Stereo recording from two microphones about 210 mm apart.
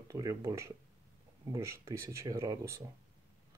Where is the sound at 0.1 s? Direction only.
15° right (ahead or behind).